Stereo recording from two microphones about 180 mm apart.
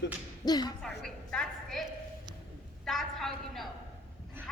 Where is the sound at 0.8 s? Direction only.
5° left (ahead or behind).